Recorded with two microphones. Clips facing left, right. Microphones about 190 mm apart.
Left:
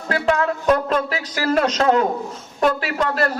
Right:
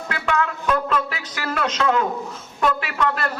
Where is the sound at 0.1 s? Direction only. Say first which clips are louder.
Left 5 dB; 35° left (ahead or behind).